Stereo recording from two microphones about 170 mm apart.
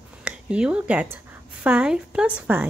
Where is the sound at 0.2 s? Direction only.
5° right (ahead or behind).